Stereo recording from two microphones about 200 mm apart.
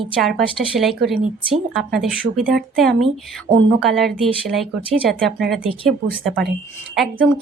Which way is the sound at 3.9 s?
Centre (ahead or behind).